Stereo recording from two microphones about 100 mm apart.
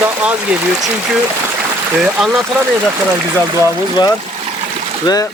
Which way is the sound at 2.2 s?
5° right (ahead or behind).